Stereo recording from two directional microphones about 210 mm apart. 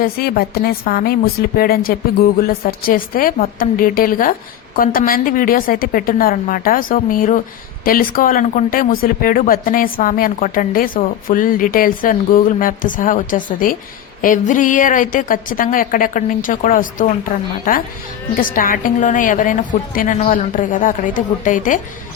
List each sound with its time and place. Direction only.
0.0 s a woman's voice: 45° left (ahead or behind)